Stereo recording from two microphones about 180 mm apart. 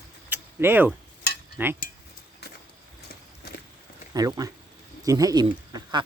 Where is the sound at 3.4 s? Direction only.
60° left (ahead or behind).